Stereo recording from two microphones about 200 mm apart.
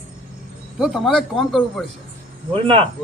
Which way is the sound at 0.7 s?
Centre (ahead or behind).